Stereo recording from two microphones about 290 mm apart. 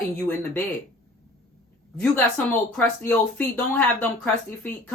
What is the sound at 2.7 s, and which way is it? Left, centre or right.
Speech, centre.